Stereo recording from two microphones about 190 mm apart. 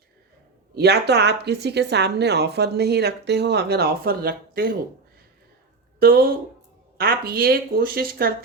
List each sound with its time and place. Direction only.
0.8 s a woman's voice: 60° right (ahead or behind)
6.0 s speech: 50° right (ahead or behind)